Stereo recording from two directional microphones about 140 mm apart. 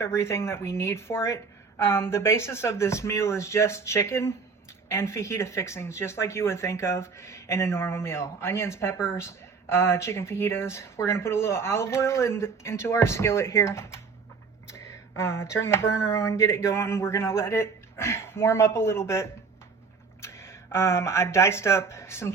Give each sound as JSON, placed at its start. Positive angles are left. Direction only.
{"t": 0.0, "sound": "speech", "side_deg": 20}